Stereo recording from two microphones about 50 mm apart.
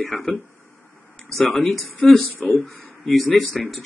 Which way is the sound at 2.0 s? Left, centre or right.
Centre.